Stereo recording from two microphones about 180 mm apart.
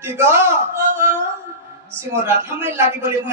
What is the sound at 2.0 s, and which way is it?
A man's voice, 15° right (ahead or behind).